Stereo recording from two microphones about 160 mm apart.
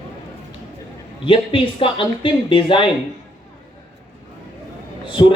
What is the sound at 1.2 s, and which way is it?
Speech, 35° left (ahead or behind).